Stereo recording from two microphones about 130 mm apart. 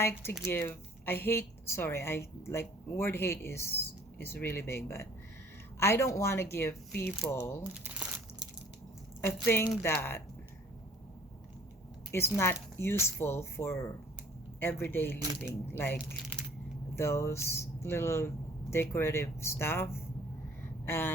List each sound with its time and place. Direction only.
0.0 s a woman's voice: 20° left (ahead or behind)
7.7 s crumpling: 10° right (ahead or behind)
9.2 s a woman's voice: 20° left (ahead or behind)
12.1 s a woman's voice: 20° left (ahead or behind)